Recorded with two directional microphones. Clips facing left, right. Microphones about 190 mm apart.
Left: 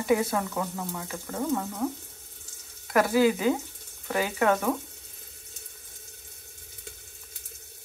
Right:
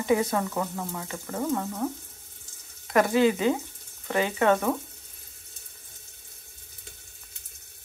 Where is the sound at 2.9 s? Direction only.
Centre (ahead or behind).